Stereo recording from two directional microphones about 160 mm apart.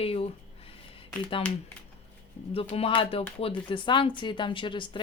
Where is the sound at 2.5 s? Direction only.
35° left (ahead or behind).